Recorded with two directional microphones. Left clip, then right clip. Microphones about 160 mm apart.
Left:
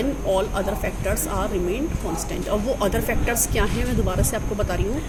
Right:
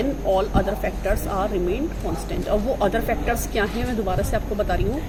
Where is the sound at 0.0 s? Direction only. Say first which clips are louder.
Right 1 dB; 5° left (ahead or behind).